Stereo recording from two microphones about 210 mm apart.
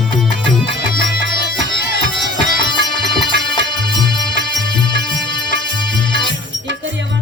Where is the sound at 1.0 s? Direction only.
60° right (ahead or behind).